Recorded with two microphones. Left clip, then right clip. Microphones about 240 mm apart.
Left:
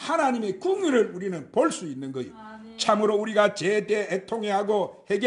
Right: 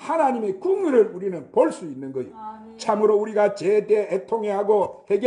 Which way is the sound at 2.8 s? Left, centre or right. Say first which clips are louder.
Right 3 dB; left.